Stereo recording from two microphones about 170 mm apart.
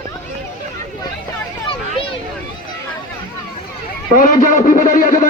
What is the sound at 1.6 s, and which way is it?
Children playing, 30° left (ahead or behind).